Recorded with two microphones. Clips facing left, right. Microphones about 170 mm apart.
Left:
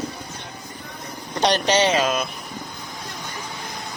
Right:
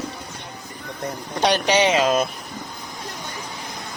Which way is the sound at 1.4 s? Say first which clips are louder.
Even; 10° right (ahead or behind).